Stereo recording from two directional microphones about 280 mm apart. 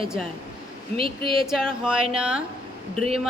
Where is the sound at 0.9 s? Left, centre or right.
Centre.